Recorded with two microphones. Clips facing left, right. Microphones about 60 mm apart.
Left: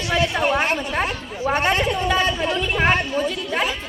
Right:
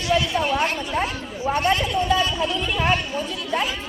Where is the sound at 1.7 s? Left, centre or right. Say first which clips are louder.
Left 1 dB; left.